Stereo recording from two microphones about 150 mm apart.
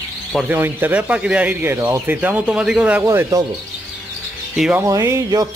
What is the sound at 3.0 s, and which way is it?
Speech, 20° right (ahead or behind).